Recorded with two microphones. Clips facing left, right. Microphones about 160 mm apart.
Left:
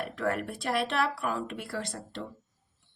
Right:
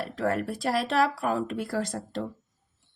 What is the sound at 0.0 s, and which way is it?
Speech, 35° right (ahead or behind).